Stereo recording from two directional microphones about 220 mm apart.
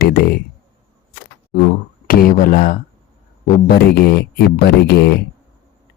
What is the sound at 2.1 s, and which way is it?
Speech, 40° left (ahead or behind).